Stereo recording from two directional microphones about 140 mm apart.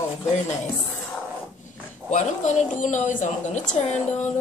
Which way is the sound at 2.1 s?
60° left (ahead or behind).